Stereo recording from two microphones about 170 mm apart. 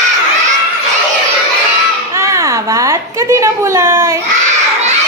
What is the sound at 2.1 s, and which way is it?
A woman's voice, 15° right (ahead or behind).